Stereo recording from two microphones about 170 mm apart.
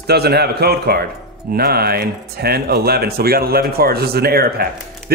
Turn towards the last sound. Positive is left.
turn(degrees=-70)  # may be behind; listen again after turning